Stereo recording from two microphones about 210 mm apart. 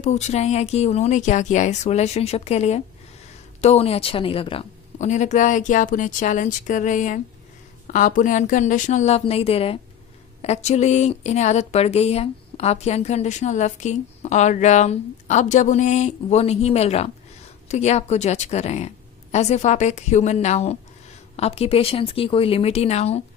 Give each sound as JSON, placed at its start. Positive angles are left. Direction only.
{"t": 0.0, "sound": "speech", "side_deg": 30}